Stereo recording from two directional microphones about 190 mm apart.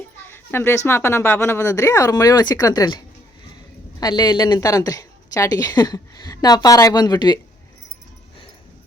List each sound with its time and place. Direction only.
0.3 s a sound: 10° left (ahead or behind)
0.9 s speech: 10° left (ahead or behind)
4.0 s a woman's voice: 20° left (ahead or behind)